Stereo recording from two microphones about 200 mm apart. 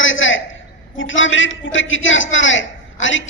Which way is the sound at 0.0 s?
75° left (ahead or behind).